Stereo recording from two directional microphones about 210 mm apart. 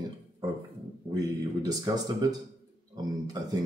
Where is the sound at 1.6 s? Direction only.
20° right (ahead or behind).